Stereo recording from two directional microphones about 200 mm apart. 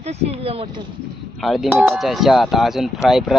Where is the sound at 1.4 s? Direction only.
Centre (ahead or behind).